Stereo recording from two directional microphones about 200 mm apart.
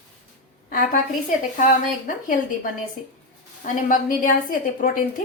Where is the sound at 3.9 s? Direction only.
45° left (ahead or behind).